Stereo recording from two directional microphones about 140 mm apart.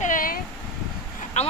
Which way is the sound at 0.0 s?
80° left.